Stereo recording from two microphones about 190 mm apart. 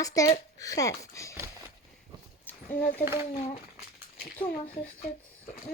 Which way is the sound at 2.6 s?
45° left (ahead or behind).